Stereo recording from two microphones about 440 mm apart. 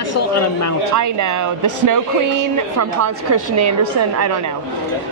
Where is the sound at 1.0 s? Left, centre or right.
Right.